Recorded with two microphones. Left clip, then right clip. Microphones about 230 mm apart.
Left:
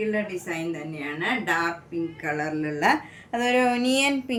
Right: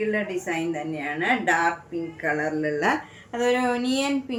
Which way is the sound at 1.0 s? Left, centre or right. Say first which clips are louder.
Right 3 dB; centre.